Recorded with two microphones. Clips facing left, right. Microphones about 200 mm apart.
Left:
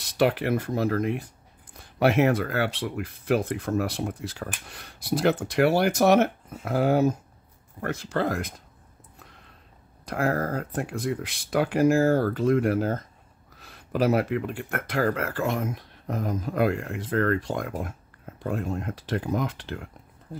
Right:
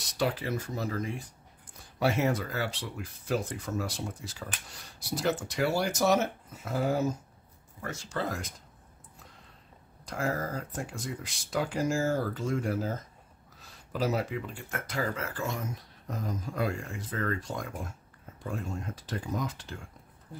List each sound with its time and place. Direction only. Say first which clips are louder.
0.2 s speech: left 8 dB; 60° left (ahead or behind)
10.0 s speech: left 6 dB; 60° left (ahead or behind)